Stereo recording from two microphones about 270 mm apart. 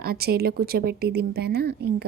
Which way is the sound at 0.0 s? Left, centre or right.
Right.